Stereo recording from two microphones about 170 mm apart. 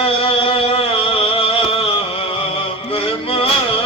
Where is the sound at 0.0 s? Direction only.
35° left (ahead or behind).